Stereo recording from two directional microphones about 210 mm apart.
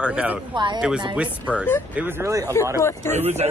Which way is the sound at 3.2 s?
30° right (ahead or behind).